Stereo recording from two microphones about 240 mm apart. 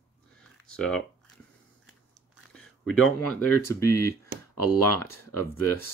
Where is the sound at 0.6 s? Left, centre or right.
Centre.